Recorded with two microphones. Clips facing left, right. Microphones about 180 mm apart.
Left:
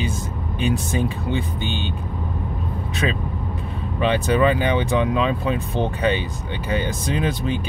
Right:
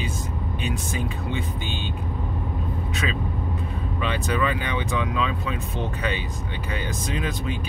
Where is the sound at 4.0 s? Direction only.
30° left (ahead or behind).